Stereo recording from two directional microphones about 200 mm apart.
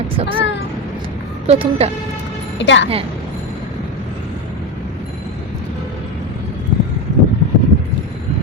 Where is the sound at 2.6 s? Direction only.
65° left (ahead or behind).